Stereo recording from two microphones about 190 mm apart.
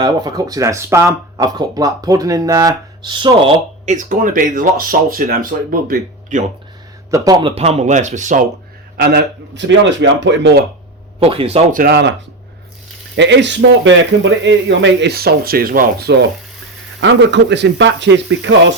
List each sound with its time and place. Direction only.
0.2 s speech: 20° right (ahead or behind)
3.8 s speech: 45° right (ahead or behind)
7.1 s speech: 20° right (ahead or behind)
7.5 s speech: 35° right (ahead or behind)
9.0 s a man's voice: 55° right (ahead or behind)
9.6 s speech: 70° right (ahead or behind)
11.2 s speech: 30° right (ahead or behind)
11.8 s speech: 55° right (ahead or behind)
13.1 s speech: 70° right (ahead or behind)
17.0 s speech: 70° right (ahead or behind)